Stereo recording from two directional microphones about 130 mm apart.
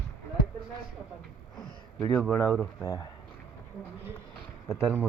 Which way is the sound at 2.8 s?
25° left (ahead or behind).